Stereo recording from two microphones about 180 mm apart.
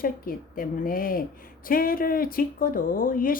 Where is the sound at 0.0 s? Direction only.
55° left (ahead or behind).